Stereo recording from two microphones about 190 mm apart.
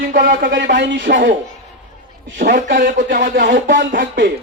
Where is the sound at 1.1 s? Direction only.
45° right (ahead or behind).